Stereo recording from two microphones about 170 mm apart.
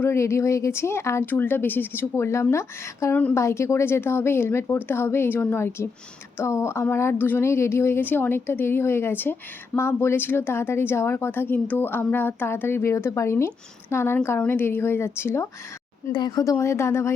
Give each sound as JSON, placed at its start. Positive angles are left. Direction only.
{"t": 0.0, "sound": "a woman's voice", "side_deg": 15}